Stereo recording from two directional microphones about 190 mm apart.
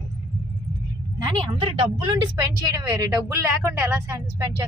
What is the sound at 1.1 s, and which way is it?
A woman's voice, 25° right (ahead or behind).